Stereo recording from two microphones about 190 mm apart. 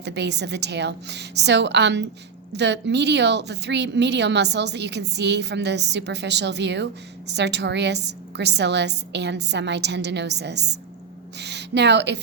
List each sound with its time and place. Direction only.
0.0 s a woman's voice: 65° right (ahead or behind)